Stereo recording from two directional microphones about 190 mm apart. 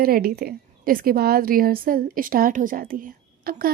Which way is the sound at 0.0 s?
50° right (ahead or behind).